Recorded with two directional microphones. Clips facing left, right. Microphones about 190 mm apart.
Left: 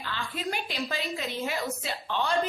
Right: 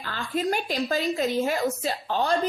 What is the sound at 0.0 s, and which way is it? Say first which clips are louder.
A woman's voice: right 6 dB; 45° right (ahead or behind).